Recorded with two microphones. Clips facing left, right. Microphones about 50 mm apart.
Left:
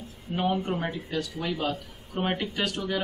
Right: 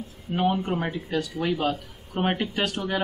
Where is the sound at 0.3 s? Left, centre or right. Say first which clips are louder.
Right 3 dB; centre.